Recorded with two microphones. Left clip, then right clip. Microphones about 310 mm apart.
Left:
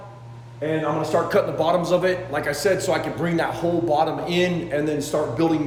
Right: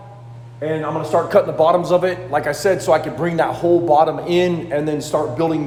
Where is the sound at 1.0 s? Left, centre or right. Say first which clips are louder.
Right 7 dB; centre.